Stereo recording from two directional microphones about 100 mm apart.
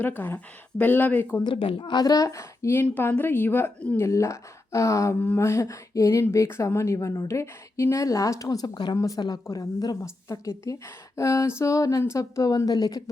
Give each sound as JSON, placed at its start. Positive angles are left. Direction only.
{"t": 0.0, "sound": "speech", "side_deg": 20}
{"t": 1.5, "sound": "speech", "side_deg": 65}
{"t": 9.0, "sound": "speech", "side_deg": 35}